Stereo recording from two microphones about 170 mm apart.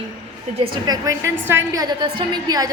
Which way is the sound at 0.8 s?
20° right (ahead or behind).